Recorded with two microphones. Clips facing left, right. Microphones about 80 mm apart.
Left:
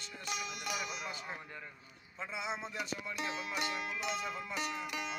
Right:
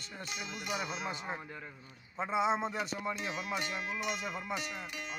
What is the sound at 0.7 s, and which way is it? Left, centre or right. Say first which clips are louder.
Speech: right 7 dB; right.